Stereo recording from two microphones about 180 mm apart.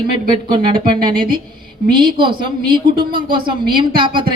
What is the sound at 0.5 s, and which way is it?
A woman's voice, 25° right (ahead or behind).